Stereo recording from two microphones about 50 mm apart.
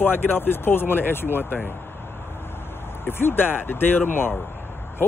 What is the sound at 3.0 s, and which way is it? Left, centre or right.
Speech, left.